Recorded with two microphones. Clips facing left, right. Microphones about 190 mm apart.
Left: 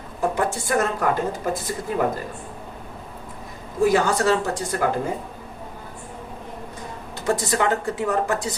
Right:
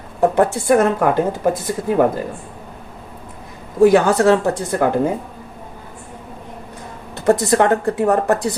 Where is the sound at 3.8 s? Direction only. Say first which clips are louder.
Right 7 dB; 60° right (ahead or behind).